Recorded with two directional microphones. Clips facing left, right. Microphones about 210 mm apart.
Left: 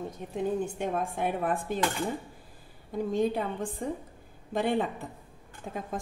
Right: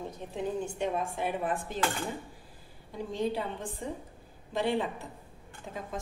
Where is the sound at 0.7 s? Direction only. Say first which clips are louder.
Left 1 dB; 55° left (ahead or behind).